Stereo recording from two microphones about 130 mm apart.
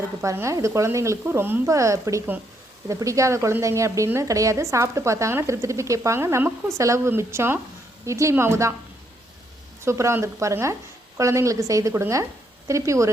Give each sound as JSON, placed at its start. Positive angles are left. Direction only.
{"t": 0.2, "sound": "a woman's voice", "side_deg": -20}
{"t": 9.8, "sound": "a woman's voice", "side_deg": -20}